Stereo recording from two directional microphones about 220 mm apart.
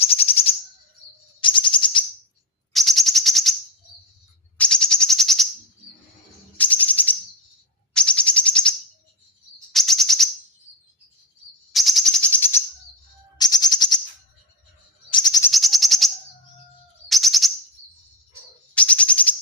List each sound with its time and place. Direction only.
0.0 s a sound: 25° left (ahead or behind)
1.4 s bird: 20° left (ahead or behind)
2.7 s chirp: centre (ahead or behind)
4.5 s bird: 5° left (ahead or behind)
6.6 s music: 5° left (ahead or behind)
7.9 s bird: 5° left (ahead or behind)
9.7 s chirp: centre (ahead or behind)
11.7 s a sound: centre (ahead or behind)
13.4 s a sound: 20° left (ahead or behind)
15.1 s bird: 20° left (ahead or behind)
15.5 s a sound: centre (ahead or behind)
17.1 s bird: centre (ahead or behind)
18.7 s bird: 5° left (ahead or behind)